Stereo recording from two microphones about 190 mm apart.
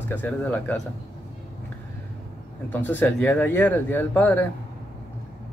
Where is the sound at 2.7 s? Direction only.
10° left (ahead or behind).